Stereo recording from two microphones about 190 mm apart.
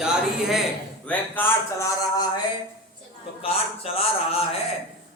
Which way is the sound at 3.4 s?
30° left (ahead or behind).